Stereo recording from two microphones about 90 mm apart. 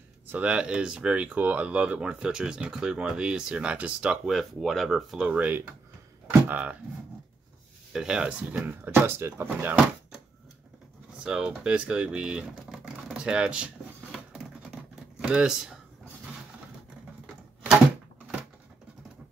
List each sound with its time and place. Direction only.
0.3 s speech: 15° right (ahead or behind)
7.9 s speech: 5° right (ahead or behind); by 9.8 s 25° right (ahead or behind)
11.1 s speech: 10° right (ahead or behind)
14.1 s computer keyboard: 5° right (ahead or behind)
15.2 s speech: 10° right (ahead or behind)